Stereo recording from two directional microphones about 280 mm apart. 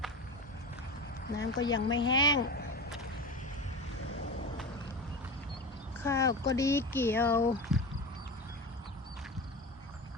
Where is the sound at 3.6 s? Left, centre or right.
Left.